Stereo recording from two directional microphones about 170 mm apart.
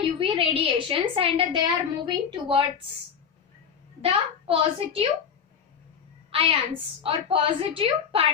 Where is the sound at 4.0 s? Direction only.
35° right (ahead or behind).